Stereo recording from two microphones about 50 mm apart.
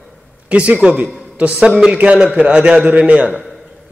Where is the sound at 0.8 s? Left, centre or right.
Right.